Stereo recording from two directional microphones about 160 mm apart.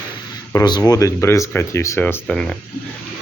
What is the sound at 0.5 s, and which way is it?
Speech, 25° left (ahead or behind).